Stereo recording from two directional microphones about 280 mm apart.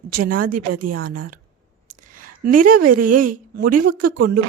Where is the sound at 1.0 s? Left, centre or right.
Right.